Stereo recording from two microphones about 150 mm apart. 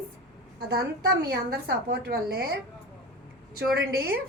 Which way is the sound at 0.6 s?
90° right.